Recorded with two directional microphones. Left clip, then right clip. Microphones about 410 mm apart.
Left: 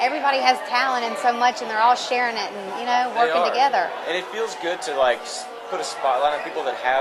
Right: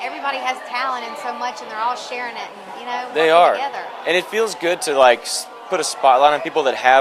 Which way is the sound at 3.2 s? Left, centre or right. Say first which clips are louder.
Right 10 dB; right.